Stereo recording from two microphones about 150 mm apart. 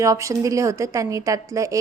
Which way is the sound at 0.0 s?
20° right (ahead or behind).